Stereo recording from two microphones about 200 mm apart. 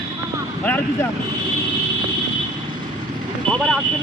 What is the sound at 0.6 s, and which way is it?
Speech, 10° left (ahead or behind).